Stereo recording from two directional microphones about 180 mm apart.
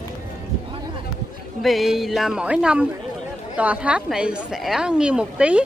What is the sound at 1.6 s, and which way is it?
A woman's voice, centre (ahead or behind).